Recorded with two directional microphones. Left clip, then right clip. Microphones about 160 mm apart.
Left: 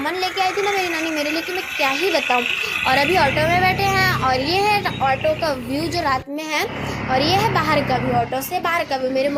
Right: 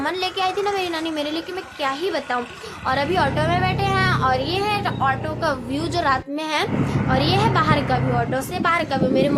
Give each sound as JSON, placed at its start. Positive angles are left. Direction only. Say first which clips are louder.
{"t": 0.3, "sound": "a child's voice", "louder": "left 3 dB", "side_deg": 5}
{"t": 1.8, "sound": "a child's voice", "louder": "left 4 dB", "side_deg": 15}
{"t": 7.1, "sound": "a child's voice", "louder": "left 2 dB", "side_deg": 5}